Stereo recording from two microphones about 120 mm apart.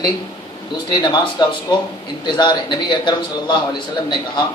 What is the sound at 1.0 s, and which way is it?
A man's voice, 40° left (ahead or behind).